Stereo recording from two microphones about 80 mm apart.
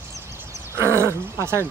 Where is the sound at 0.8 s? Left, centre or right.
Right.